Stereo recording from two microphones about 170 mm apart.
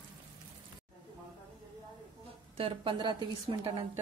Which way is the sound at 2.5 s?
30° right (ahead or behind).